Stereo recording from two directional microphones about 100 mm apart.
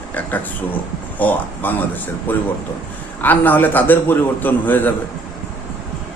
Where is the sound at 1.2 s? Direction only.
15° left (ahead or behind).